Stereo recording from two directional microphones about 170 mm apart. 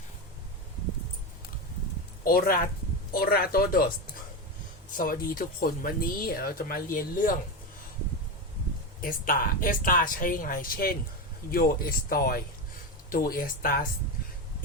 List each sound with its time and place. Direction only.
2.2 s speech: 55° left (ahead or behind)
4.9 s speech: 55° left (ahead or behind)
9.0 s speech: 55° left (ahead or behind)